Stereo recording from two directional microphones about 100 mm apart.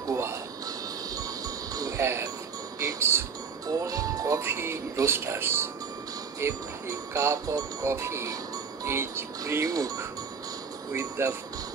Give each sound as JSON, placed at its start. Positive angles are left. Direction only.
{"t": 0.0, "sound": "music", "side_deg": -30}
{"t": 1.8, "sound": "music", "side_deg": -30}
{"t": 3.6, "sound": "music", "side_deg": -35}
{"t": 6.4, "sound": "speech", "side_deg": -30}